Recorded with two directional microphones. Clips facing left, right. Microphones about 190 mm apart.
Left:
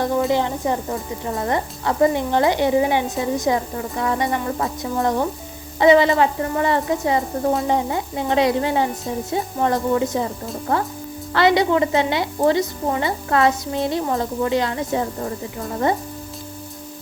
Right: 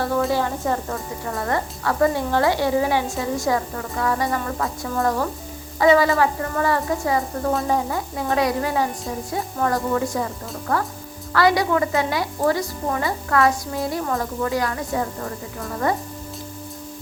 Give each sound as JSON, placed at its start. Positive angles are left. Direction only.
{"t": 0.0, "sound": "a woman's voice", "side_deg": 20}